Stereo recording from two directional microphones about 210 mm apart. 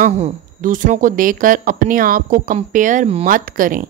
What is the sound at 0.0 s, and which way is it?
A woman's voice, 40° right (ahead or behind).